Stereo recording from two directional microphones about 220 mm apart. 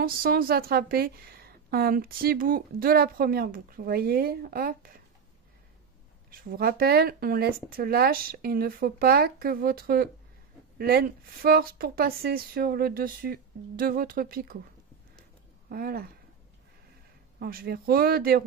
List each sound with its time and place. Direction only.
0.0 s a woman's voice: 40° right (ahead or behind)
6.3 s a woman's voice: 40° right (ahead or behind)
15.7 s a woman's voice: 45° right (ahead or behind)
17.4 s a woman's voice: 45° right (ahead or behind)